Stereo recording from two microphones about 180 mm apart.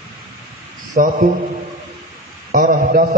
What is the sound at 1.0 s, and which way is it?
Speech, 50° right (ahead or behind).